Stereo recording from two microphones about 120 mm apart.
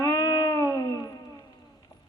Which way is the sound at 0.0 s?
30° left (ahead or behind).